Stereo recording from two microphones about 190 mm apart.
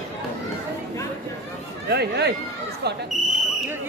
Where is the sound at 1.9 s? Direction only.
60° right (ahead or behind).